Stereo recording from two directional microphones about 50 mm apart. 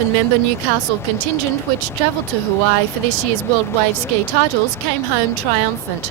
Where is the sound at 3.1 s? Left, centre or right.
Left.